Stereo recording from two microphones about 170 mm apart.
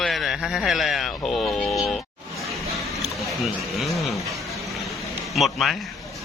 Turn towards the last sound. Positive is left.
turn(degrees=0)  # may be behind; listen again after turning